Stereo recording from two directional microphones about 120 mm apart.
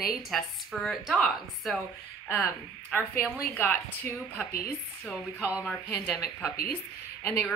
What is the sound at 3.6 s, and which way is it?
Speech, 15° left (ahead or behind).